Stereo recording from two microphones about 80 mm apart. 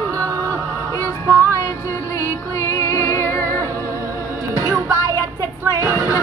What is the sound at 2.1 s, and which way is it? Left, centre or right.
Music, left.